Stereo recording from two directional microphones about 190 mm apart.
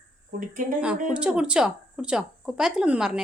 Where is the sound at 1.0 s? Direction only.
5° right (ahead or behind).